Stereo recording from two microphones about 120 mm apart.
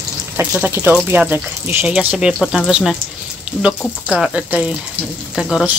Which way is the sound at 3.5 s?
15° left (ahead or behind).